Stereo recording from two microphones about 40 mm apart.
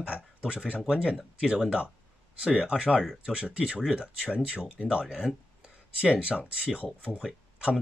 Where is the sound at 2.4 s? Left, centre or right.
Right.